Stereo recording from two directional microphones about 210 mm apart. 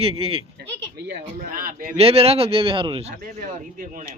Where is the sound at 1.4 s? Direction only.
45° right (ahead or behind).